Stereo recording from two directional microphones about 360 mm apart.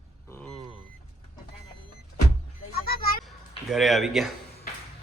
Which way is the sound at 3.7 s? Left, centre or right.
Centre.